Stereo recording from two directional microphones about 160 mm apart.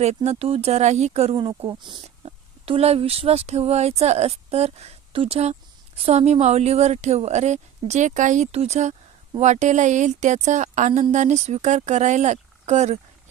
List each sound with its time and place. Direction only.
0.0 s speech: 40° right (ahead or behind)
1.4 s a woman's voice: 30° right (ahead or behind)